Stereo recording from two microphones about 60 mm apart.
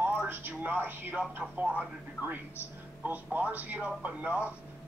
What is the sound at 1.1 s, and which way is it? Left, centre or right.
Speech, right.